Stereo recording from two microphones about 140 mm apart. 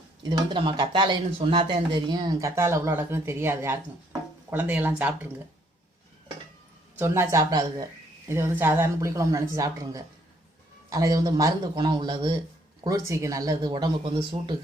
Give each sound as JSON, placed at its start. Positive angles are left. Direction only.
{"t": 0.2, "sound": "speech", "side_deg": -30}
{"t": 7.0, "sound": "speech", "side_deg": -20}